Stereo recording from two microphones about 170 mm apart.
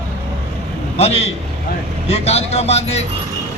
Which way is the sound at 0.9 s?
40° left (ahead or behind).